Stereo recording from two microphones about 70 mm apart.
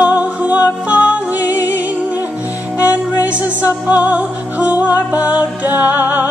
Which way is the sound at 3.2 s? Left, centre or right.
Centre.